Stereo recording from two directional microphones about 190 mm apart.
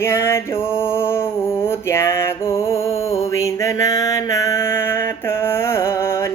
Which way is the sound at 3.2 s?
15° left (ahead or behind).